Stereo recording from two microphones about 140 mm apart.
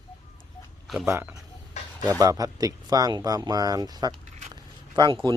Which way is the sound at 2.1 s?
25° right (ahead or behind).